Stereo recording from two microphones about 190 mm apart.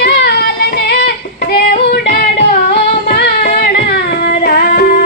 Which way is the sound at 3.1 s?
60° left (ahead or behind).